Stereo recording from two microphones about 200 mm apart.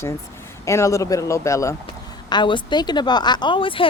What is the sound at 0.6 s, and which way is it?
Speech, 15° left (ahead or behind).